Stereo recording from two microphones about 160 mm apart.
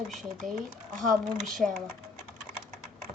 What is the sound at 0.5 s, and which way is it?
Speech, 55° right (ahead or behind).